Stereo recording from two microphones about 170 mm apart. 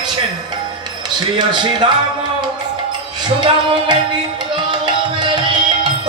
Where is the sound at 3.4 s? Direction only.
30° right (ahead or behind).